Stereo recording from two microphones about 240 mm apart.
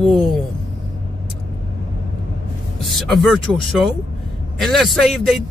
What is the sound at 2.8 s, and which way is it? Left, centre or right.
A man's voice, centre.